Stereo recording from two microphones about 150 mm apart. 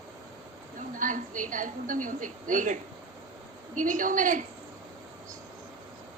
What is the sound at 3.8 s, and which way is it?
Speech, 60° right (ahead or behind).